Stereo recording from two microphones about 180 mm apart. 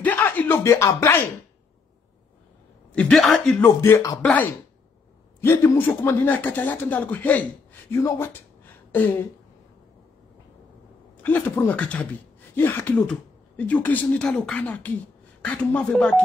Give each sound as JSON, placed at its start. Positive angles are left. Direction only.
{"t": 0.0, "sound": "a sound", "side_deg": 10}
{"t": 2.9, "sound": "speech", "side_deg": 5}
{"t": 3.6, "sound": "speech", "side_deg": 15}
{"t": 11.2, "sound": "speech", "side_deg": 10}